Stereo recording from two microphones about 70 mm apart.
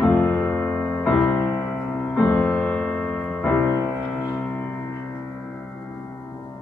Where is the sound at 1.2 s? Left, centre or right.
Left.